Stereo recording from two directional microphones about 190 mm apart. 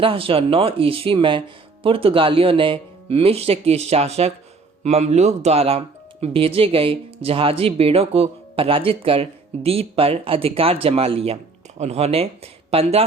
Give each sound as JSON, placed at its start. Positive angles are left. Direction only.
{"t": 0.0, "sound": "speech", "side_deg": -30}